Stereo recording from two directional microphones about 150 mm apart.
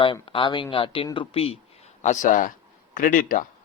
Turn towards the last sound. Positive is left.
turn(degrees=65)  # may be behind; listen again after turning